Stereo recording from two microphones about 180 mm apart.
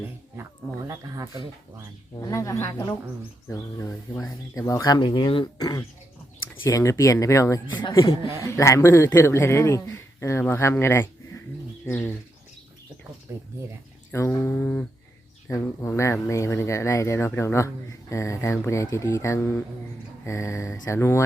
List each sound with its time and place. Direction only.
0.9 s speech: 15° right (ahead or behind)
2.2 s speech: 20° left (ahead or behind)
13.3 s speech: 15° right (ahead or behind)
14.1 s speech: 15° left (ahead or behind)